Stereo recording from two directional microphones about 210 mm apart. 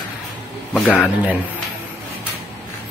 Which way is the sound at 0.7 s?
5° left (ahead or behind).